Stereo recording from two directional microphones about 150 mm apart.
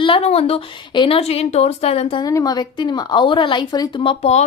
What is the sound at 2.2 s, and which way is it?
Speech, 25° left (ahead or behind).